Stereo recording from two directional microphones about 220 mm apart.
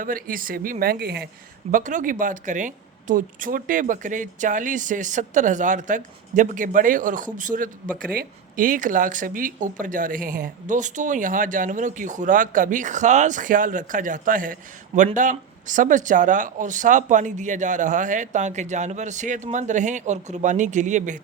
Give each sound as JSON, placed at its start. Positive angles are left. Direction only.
{"t": 0.0, "sound": "speech", "side_deg": -40}
{"t": 1.7, "sound": "speech", "side_deg": -35}